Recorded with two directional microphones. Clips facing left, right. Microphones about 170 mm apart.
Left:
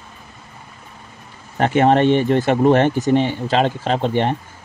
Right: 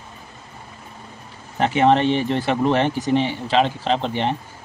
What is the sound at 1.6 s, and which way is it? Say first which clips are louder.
Speech: left 2 dB; 50° left (ahead or behind).